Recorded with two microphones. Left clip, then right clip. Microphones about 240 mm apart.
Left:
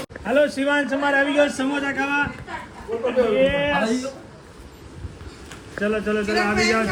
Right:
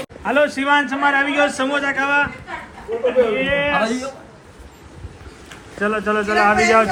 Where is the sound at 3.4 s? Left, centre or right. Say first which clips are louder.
Right 3 dB; right.